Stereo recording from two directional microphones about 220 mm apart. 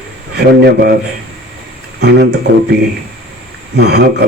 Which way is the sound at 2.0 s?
50° right (ahead or behind).